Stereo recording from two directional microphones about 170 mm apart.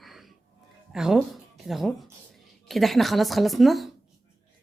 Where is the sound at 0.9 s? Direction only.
5° right (ahead or behind).